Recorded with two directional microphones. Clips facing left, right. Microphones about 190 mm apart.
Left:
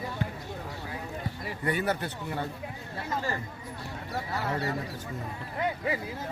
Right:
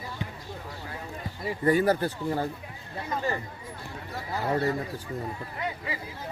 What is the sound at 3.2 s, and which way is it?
Speech, 20° right (ahead or behind).